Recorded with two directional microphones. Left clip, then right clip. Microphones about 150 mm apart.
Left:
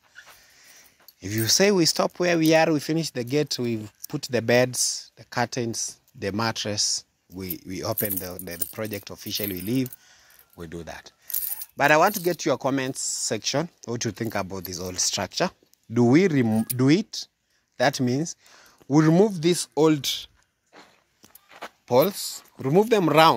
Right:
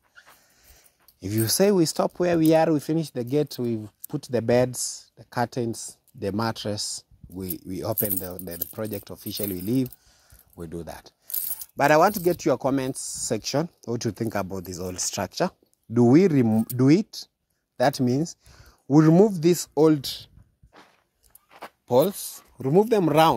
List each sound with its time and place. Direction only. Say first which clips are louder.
0.6 s speech: left 6 dB; 50° right (ahead or behind)
20.7 s walk: left 2 dB; 10° left (ahead or behind)
21.5 s a sound: left 2 dB; 10° right (ahead or behind)
21.8 s speech: even; 45° right (ahead or behind)